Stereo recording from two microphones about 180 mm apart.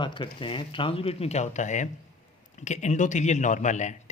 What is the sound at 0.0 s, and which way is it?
A man's voice, 25° left (ahead or behind).